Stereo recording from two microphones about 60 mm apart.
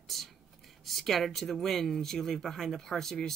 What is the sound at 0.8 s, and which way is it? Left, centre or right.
Speech, centre.